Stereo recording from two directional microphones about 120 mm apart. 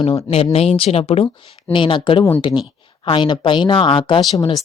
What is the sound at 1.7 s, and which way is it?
Speech, 45° left (ahead or behind).